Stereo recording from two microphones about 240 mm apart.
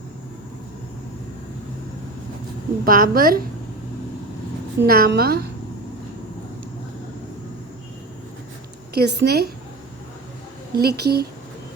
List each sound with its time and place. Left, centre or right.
2.8 s a woman's voice: right
4.8 s a woman's voice: right
9.0 s a woman's voice: right
10.8 s a woman's voice: right